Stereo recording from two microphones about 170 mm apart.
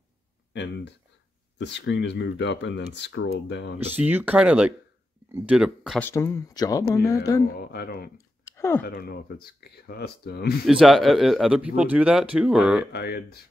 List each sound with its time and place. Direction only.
0.5 s speech: 85° left
3.9 s a man's voice: 10° right (ahead or behind)
5.9 s speech: 15° left (ahead or behind)
7.5 s speech: 65° left (ahead or behind)
8.5 s a sound: 15° left (ahead or behind)
8.8 s speech: 65° left (ahead or behind)
10.7 s a man's voice: centre (ahead or behind)
12.9 s speech: 70° left (ahead or behind)